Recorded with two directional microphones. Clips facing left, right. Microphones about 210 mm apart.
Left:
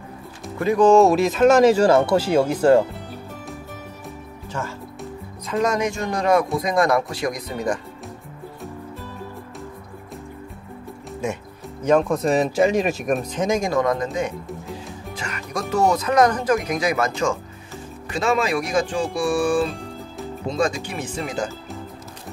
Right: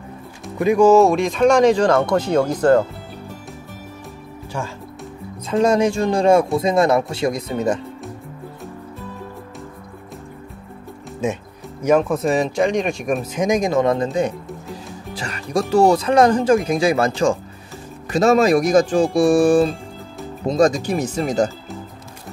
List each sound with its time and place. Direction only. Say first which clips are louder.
0.6 s speech: right 2 dB; 10° right (ahead or behind); by 2.8 s 10° left (ahead or behind)
5.5 s speech: right 5 dB; 30° right (ahead or behind)
11.8 s speech: right 2 dB; 5° right (ahead or behind); by 14.3 s 30° right (ahead or behind)
14.7 s music: right 1 dB; centre (ahead or behind)
15.1 s music: right 8 dB; 30° right (ahead or behind)
15.7 s speech: right 4 dB; 30° right (ahead or behind)